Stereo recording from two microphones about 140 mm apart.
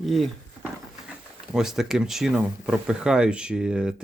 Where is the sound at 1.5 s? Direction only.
5° right (ahead or behind).